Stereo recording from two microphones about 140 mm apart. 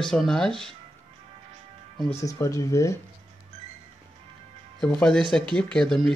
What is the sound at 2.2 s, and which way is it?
Speech, 25° left (ahead or behind).